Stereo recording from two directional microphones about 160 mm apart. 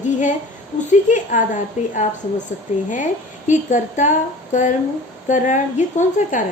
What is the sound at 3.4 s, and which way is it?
A woman's voice, 50° left (ahead or behind).